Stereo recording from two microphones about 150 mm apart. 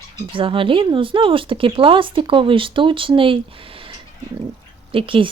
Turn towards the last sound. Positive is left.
turn(degrees=-35)  # may be behind; listen again after turning